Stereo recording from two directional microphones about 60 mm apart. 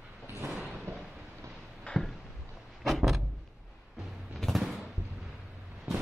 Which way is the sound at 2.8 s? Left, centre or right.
Centre.